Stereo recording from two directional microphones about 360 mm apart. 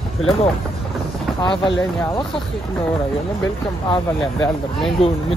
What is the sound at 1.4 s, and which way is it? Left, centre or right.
Speech, centre.